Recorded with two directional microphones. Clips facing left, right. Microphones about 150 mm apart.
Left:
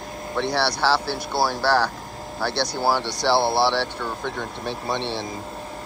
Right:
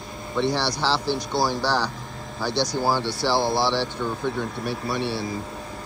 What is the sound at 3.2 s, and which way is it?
Speech, 15° right (ahead or behind).